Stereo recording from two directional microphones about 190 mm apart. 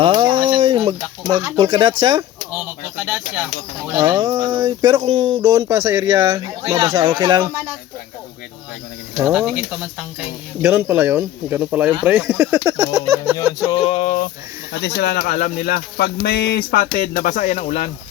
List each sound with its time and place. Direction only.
0.0 s a sound: 25° right (ahead or behind)
1.5 s speech: 25° right (ahead or behind)
2.5 s bird: 10° right (ahead or behind)
4.0 s speech: 20° right (ahead or behind)
9.2 s speech: centre (ahead or behind)
13.8 s speech: 35° left (ahead or behind)
14.8 s speech: 60° left (ahead or behind)
17.0 s speech: 45° left (ahead or behind)